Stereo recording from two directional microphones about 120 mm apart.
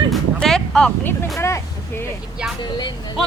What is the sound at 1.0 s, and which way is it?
Speech, 20° left (ahead or behind).